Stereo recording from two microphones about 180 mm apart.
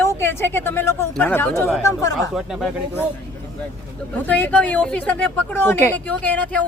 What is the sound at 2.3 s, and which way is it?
Speech, centre (ahead or behind).